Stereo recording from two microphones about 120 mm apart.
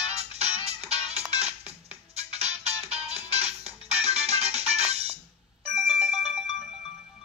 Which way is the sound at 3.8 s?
60° right (ahead or behind).